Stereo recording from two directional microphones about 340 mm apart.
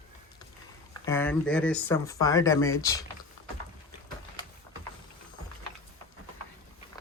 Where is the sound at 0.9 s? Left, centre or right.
Centre.